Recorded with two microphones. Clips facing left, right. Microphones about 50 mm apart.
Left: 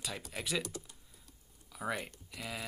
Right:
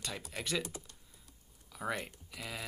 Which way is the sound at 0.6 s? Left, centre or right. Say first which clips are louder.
Even; right.